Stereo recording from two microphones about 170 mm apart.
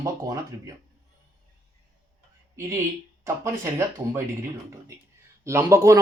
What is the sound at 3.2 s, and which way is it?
Speech, 15° right (ahead or behind).